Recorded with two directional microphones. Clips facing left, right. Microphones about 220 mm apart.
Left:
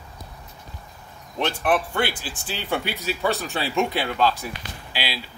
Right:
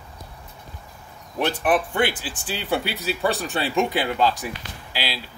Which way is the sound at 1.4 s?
5° right (ahead or behind).